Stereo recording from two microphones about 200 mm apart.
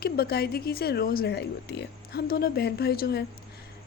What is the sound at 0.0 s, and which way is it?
Speech, 50° left (ahead or behind).